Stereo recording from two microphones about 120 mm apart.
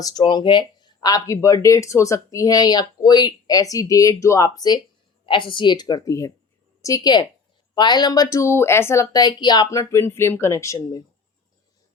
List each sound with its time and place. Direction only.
0.0 s speech: 35° left (ahead or behind)
5.2 s a woman's voice: 45° left (ahead or behind); by 10.8 s 25° left (ahead or behind)